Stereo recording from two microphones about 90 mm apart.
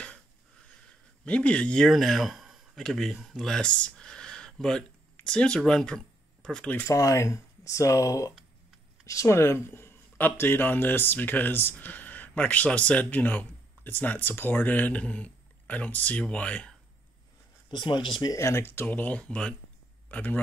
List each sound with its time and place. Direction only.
1.2 s speech: 15° left (ahead or behind)
1.9 s speech: centre (ahead or behind)
6.9 s speech: 35° left (ahead or behind); by 16.7 s 15° left (ahead or behind)
17.6 s speech: 60° left (ahead or behind)
18.3 s speech: 30° left (ahead or behind)